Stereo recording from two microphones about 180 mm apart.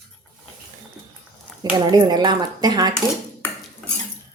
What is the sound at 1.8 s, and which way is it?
Speech, 20° right (ahead or behind).